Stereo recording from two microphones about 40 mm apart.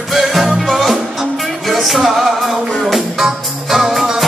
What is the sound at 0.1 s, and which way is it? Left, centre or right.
Music, centre.